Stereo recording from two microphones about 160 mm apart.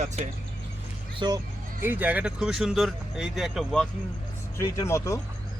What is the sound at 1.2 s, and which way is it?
Speech, 25° right (ahead or behind).